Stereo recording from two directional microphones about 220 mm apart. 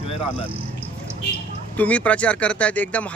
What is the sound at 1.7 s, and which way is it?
Speech, 5° left (ahead or behind).